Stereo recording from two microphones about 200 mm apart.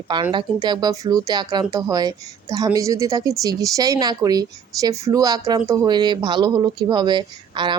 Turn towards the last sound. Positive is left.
turn(degrees=-20)  # may be behind; listen again after turning